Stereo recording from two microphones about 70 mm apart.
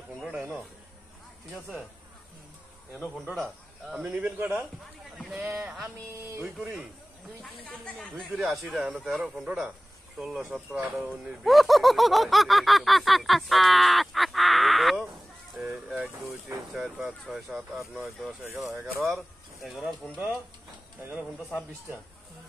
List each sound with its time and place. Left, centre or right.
0.4 s a sound: centre
4.0 s speech: right
7.8 s speech: centre
8.3 s speech: centre
11.4 s a sound: centre
15.5 s speech: centre
21.1 s speech: centre